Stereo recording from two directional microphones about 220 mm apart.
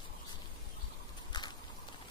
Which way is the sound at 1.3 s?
20° left (ahead or behind).